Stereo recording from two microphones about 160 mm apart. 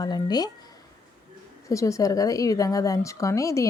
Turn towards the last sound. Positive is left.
turn(degrees=20)  # may be behind; listen again after turning